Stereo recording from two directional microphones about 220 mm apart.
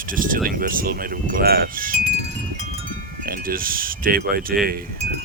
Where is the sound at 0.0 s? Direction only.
40° right (ahead or behind).